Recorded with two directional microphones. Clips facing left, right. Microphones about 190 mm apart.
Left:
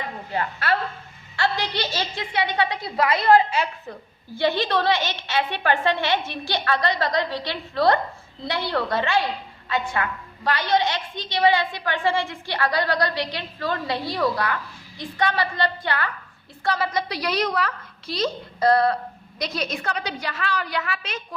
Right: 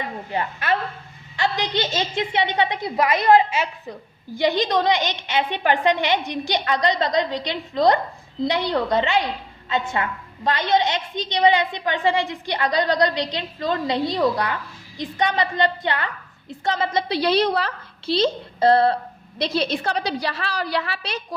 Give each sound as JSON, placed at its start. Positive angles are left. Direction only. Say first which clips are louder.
{"t": 0.3, "sound": "a woman's voice", "louder": "right 1 dB", "side_deg": -20}